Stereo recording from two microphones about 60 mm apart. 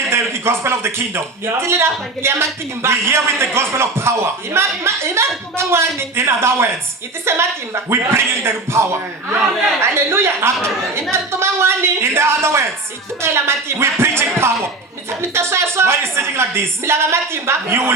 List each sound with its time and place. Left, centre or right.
0.1 s a woman's voice: right